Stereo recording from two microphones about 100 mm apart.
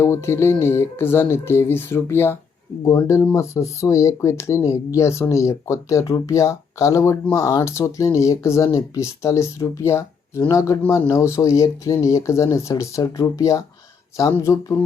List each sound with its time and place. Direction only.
0.0 s speech: 25° left (ahead or behind)